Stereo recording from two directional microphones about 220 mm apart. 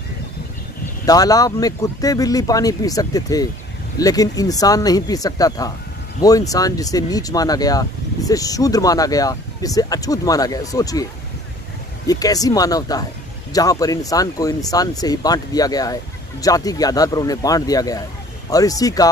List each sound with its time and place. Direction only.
1.0 s speech: 15° left (ahead or behind)
12.1 s speech: 15° left (ahead or behind)